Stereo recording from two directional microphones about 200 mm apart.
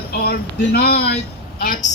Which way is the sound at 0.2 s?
50° left (ahead or behind).